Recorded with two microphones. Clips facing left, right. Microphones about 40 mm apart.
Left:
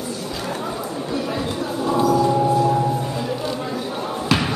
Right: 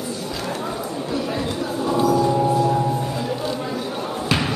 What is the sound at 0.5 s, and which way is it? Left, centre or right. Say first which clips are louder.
Chatter: left 1 dB; centre.